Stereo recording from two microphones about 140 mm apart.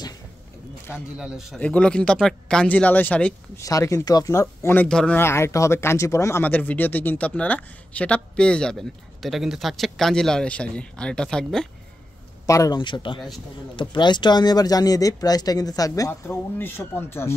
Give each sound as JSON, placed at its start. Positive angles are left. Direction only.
{"t": 0.9, "sound": "speech", "side_deg": -5}
{"t": 1.6, "sound": "speech", "side_deg": 10}
{"t": 3.5, "sound": "speech", "side_deg": 25}
{"t": 4.8, "sound": "speech", "side_deg": 5}
{"t": 12.4, "sound": "speech", "side_deg": 25}
{"t": 12.7, "sound": "speech", "side_deg": 35}